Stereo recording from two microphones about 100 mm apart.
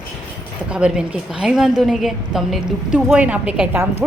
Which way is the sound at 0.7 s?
10° right (ahead or behind).